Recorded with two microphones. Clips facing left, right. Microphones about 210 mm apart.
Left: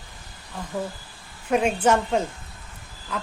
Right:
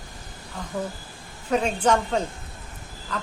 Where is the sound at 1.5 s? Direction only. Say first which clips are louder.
Left 1 dB; 10° left (ahead or behind).